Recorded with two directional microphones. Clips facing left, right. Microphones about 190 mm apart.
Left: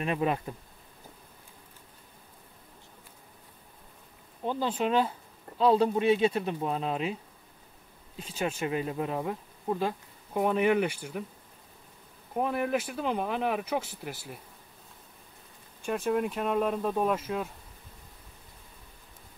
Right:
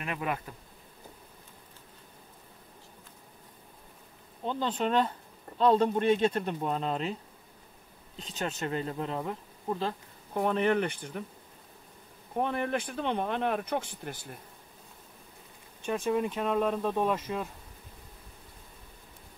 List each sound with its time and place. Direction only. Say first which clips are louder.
0.0 s bee: left 5 dB; 25° left (ahead or behind)
4.5 s speech: left 1 dB; 10° left (ahead or behind)
8.2 s speech: left 3 dB; 10° left (ahead or behind)
12.4 s speech: left 2 dB; 5° left (ahead or behind)
15.8 s speech: left 1 dB; centre (ahead or behind)